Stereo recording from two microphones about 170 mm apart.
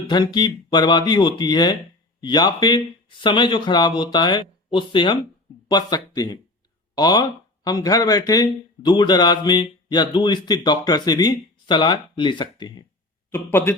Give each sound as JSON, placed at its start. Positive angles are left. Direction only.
{"t": 0.1, "sound": "speech", "side_deg": 25}
{"t": 13.3, "sound": "speech", "side_deg": 15}